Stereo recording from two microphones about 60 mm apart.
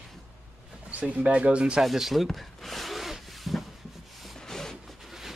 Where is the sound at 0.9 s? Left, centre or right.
Right.